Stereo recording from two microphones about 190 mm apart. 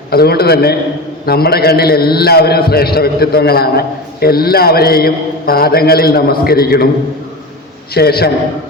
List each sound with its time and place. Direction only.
0.1 s a man's voice: 55° left (ahead or behind)
7.9 s a man's voice: 55° left (ahead or behind)